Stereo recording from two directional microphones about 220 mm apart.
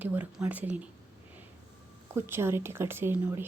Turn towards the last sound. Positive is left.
turn(degrees=-10)  # may be behind; listen again after turning